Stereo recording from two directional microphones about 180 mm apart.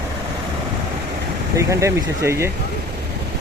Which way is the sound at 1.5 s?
15° right (ahead or behind).